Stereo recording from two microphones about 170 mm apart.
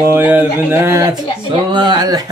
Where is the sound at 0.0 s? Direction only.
10° right (ahead or behind).